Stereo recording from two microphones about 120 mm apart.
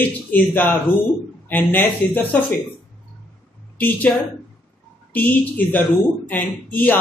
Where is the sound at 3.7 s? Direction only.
15° left (ahead or behind).